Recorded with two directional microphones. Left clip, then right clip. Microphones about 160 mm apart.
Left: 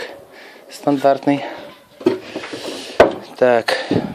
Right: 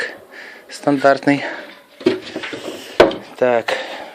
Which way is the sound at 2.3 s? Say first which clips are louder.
Even; 20° left (ahead or behind).